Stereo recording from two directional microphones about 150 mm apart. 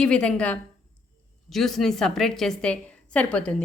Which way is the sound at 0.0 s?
5° left (ahead or behind).